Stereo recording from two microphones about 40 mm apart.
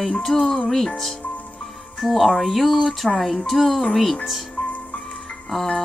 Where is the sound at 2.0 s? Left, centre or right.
Centre.